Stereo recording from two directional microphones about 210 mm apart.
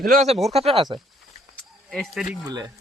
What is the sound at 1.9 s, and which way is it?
Speech, centre (ahead or behind).